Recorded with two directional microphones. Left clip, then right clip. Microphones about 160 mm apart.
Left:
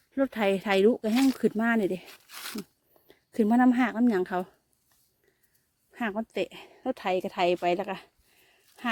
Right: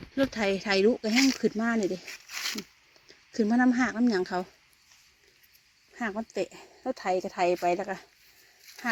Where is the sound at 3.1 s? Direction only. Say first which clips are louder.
Left 2 dB; 35° left (ahead or behind).